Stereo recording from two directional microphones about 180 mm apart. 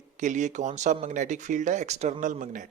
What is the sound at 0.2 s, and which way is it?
Speech, 40° right (ahead or behind).